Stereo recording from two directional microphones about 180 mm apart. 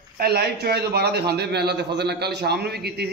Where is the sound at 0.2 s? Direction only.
60° right (ahead or behind).